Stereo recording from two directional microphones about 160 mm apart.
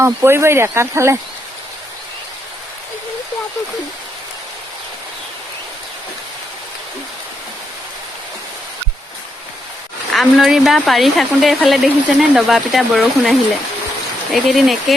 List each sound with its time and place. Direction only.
0.0 s speech: 15° right (ahead or behind)
10.1 s speech: centre (ahead or behind)
14.3 s speech: centre (ahead or behind)